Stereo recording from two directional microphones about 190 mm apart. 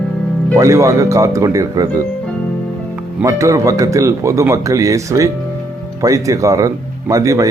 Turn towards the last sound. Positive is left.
turn(degrees=-15)  # may be behind; listen again after turning